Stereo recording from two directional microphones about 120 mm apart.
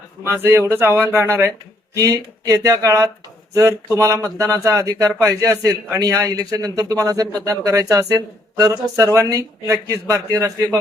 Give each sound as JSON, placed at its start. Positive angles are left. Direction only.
{"t": 0.3, "sound": "speech", "side_deg": -20}